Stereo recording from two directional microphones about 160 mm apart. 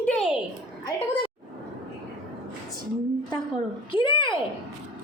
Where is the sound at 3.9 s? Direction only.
30° left (ahead or behind).